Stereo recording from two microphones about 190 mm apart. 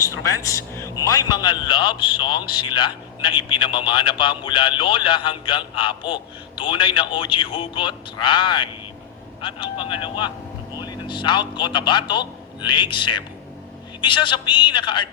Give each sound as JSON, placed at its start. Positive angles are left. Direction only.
{"t": 0.0, "sound": "a man's voice", "side_deg": 15}